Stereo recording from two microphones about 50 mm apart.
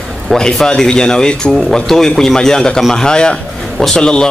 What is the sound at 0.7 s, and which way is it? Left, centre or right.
A man's voice, centre.